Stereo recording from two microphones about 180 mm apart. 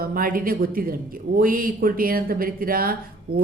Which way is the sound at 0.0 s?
55° right (ahead or behind).